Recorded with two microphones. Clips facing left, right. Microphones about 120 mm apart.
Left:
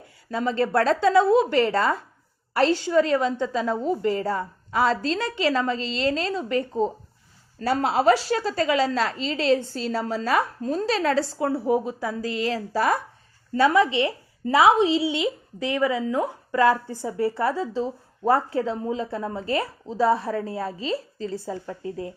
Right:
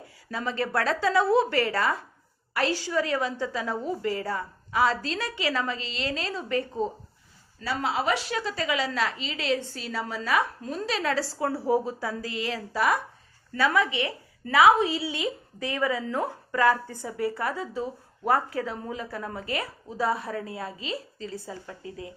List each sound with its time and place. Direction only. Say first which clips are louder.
0.3 s a woman's voice: left 6 dB; 30° left (ahead or behind)
7.6 s a woman's voice: left 7 dB; 45° left (ahead or behind)
13.5 s a woman's voice: left 6 dB; 25° left (ahead or behind)
17.1 s a woman's voice: left 5 dB; 30° left (ahead or behind)